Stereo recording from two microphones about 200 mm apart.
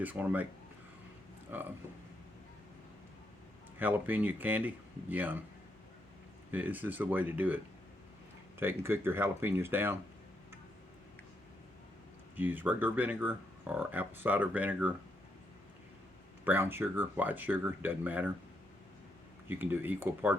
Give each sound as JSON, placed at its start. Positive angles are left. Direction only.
{"t": 0.0, "sound": "speech", "side_deg": -10}
{"t": 1.5, "sound": "speech", "side_deg": -10}
{"t": 3.8, "sound": "speech", "side_deg": -10}
{"t": 6.5, "sound": "speech", "side_deg": -10}
{"t": 12.4, "sound": "speech", "side_deg": -10}
{"t": 16.4, "sound": "speech", "side_deg": -10}
{"t": 19.5, "sound": "speech", "side_deg": -10}